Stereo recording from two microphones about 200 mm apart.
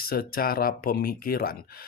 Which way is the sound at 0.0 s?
50° left (ahead or behind).